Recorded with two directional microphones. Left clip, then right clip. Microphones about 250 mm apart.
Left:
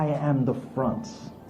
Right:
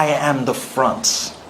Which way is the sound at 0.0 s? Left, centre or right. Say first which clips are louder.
Right 10 dB; centre.